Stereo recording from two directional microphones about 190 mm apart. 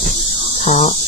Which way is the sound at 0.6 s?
40° left (ahead or behind).